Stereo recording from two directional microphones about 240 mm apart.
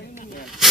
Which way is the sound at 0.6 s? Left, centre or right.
Centre.